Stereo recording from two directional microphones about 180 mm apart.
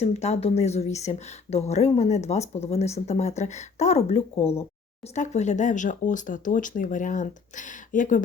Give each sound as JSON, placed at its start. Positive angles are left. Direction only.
{"t": 0.0, "sound": "a woman's voice", "side_deg": 35}